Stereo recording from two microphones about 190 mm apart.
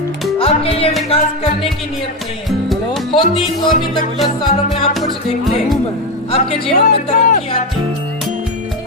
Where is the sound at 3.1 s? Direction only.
25° left (ahead or behind).